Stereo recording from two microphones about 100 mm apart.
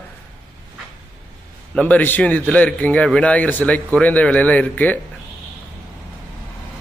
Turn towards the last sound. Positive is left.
turn(degrees=15)  # may be behind; listen again after turning